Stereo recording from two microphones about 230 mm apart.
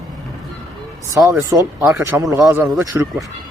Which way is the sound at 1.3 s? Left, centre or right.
Centre.